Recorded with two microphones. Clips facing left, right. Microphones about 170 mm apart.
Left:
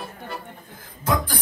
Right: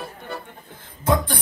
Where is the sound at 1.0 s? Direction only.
25° right (ahead or behind).